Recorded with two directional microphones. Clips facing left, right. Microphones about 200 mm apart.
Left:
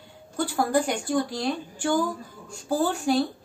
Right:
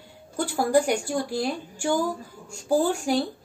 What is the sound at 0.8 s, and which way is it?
A woman's voice, 10° right (ahead or behind).